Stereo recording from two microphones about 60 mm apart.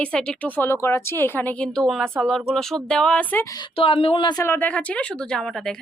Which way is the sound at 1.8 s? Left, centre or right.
Centre.